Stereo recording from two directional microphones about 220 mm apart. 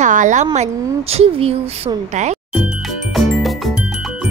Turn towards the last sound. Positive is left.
turn(degrees=0)  # may be behind; listen again after turning